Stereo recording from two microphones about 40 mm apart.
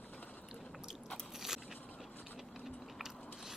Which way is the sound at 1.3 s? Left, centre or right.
Centre.